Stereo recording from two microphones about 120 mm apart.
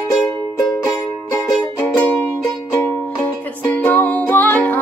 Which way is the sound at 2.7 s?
25° left (ahead or behind).